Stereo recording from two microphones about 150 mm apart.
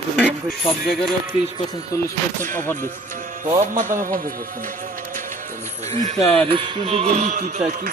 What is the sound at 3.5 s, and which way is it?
Speech, 55° right (ahead or behind).